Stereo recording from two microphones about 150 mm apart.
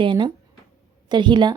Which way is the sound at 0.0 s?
30° right (ahead or behind).